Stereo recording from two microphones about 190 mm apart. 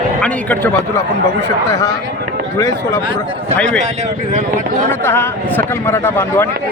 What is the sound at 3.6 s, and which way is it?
Speech, 5° left (ahead or behind).